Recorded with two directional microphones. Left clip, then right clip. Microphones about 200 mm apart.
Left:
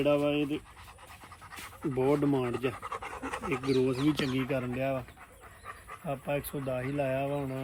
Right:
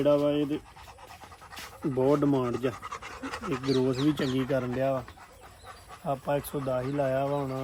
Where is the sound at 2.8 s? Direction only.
5° left (ahead or behind).